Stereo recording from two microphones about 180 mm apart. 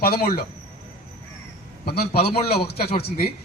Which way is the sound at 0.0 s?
60° left (ahead or behind).